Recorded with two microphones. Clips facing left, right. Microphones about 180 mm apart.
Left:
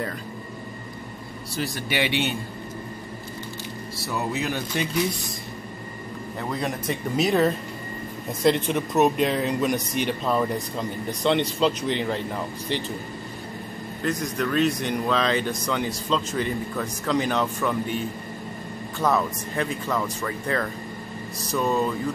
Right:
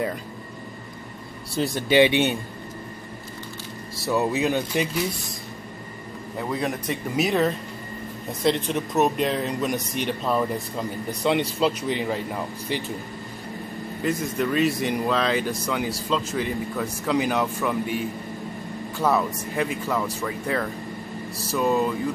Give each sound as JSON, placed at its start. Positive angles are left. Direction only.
{"t": 1.5, "sound": "speech", "side_deg": 0}
{"t": 1.8, "sound": "speech", "side_deg": -20}
{"t": 4.0, "sound": "speech", "side_deg": -15}
{"t": 6.5, "sound": "speech", "side_deg": -5}
{"t": 14.0, "sound": "speech", "side_deg": -5}